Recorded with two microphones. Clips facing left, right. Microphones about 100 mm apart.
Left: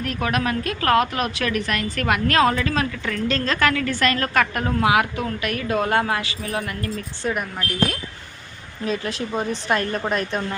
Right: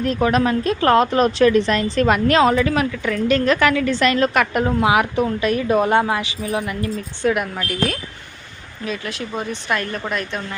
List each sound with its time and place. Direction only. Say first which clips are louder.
0.0 s a woman's voice: right 6 dB; 25° right (ahead or behind)
8.8 s a woman's voice: left 2 dB; 35° left (ahead or behind)